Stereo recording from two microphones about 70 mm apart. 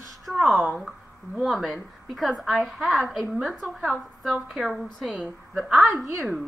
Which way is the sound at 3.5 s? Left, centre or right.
Right.